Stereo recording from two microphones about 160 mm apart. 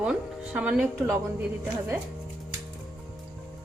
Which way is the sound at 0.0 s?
5° right (ahead or behind).